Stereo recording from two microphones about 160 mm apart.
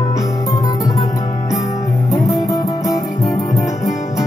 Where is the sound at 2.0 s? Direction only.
20° left (ahead or behind).